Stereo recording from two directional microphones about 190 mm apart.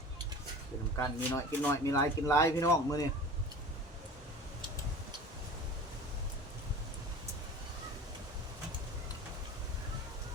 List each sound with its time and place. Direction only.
0.9 s speech: 10° left (ahead or behind)